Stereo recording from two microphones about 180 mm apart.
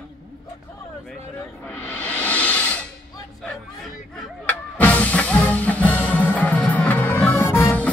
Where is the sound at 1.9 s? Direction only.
10° left (ahead or behind).